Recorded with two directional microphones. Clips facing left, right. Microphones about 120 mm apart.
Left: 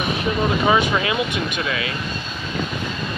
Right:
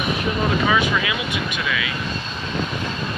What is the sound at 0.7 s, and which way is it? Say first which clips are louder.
Speech: left 2 dB; 35° left (ahead or behind).